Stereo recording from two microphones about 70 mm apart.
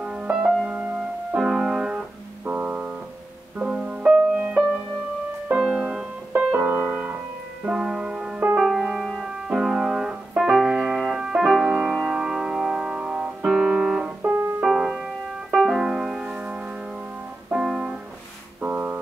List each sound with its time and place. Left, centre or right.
0.0 s music: centre
2.4 s music: right
6.3 s piano: right
7.6 s music: centre
9.5 s piano: centre
10.5 s music: centre
18.6 s a sound: right